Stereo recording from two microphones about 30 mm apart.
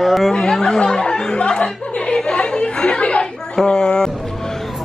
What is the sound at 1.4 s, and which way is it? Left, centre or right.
Chatter, left.